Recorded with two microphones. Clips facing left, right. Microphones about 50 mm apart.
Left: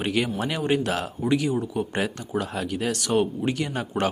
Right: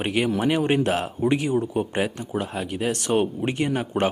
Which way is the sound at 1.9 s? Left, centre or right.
Centre.